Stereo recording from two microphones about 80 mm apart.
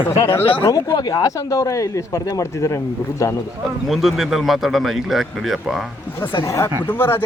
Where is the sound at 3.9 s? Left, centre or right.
Centre.